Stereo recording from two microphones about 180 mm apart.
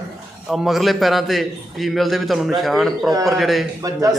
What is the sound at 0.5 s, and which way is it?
A man's voice, centre (ahead or behind).